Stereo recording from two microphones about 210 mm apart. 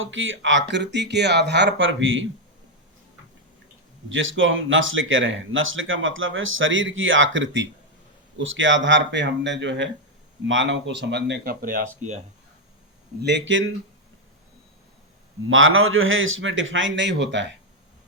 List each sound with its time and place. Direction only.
0.0 s speech: 65° right (ahead or behind)
4.1 s speech: 65° right (ahead or behind); by 11.9 s 40° right (ahead or behind)
13.2 s speech: 60° right (ahead or behind)
15.4 s speech: 70° right (ahead or behind)